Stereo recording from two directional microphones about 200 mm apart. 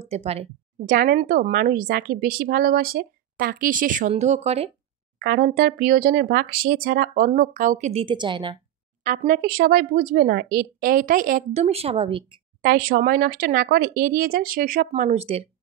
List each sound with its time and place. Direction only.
0.0 s speech: 30° right (ahead or behind)
0.8 s speech: 45° right (ahead or behind)
5.2 s speech: 45° right (ahead or behind); by 8.5 s 25° right (ahead or behind)
9.0 s speech: 45° right (ahead or behind); by 12.4 s 25° right (ahead or behind)
12.6 s speech: 45° right (ahead or behind)
14.9 s speech: 30° right (ahead or behind)